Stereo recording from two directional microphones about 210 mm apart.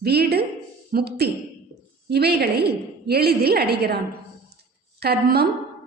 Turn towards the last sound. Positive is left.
turn(degrees=-50)  # may be behind; listen again after turning